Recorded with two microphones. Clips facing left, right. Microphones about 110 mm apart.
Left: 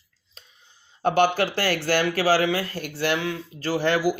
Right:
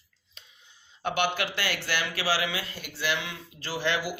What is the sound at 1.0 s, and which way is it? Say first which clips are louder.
Speech: left 8 dB; 40° left (ahead or behind).